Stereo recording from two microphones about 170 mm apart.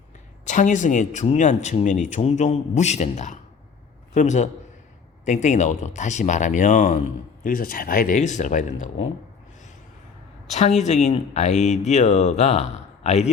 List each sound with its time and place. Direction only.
0.4 s speech: 45° left (ahead or behind)
10.5 s speech: 40° left (ahead or behind)